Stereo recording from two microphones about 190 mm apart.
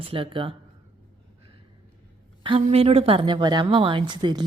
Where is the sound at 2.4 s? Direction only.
30° right (ahead or behind).